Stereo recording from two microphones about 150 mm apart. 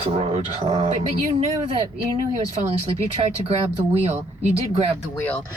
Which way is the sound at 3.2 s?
40° right (ahead or behind).